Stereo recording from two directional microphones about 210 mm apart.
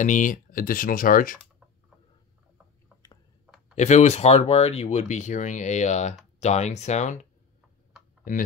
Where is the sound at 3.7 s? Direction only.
35° left (ahead or behind).